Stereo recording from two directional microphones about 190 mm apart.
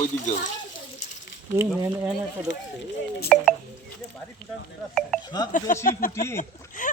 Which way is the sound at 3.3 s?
Centre (ahead or behind).